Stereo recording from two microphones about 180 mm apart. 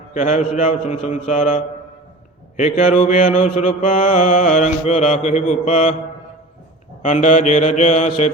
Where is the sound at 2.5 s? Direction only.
45° left (ahead or behind).